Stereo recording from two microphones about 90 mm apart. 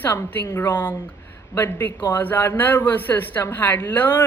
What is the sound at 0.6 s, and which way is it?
Speech, 50° left (ahead or behind).